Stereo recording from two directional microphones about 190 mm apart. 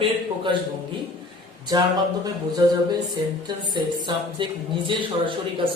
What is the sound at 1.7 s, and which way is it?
Speech, 20° right (ahead or behind).